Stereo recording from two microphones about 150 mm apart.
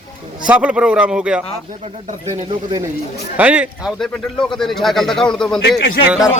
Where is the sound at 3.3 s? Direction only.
10° right (ahead or behind).